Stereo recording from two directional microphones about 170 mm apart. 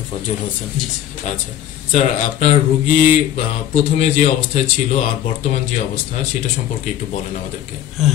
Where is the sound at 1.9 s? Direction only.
45° left (ahead or behind).